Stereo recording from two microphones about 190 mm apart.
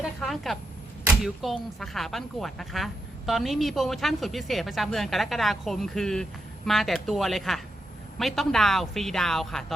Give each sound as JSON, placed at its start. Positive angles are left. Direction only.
{"t": 0.0, "sound": "a woman's voice", "side_deg": 0}